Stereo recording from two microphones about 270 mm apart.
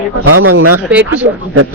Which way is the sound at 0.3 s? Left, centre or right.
Right.